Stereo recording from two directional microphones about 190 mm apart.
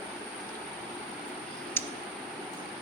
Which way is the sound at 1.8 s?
10° left (ahead or behind).